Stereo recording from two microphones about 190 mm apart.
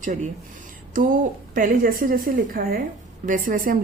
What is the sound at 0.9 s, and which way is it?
A woman's voice, 45° right (ahead or behind).